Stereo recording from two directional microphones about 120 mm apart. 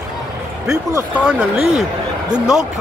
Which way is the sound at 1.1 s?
10° right (ahead or behind).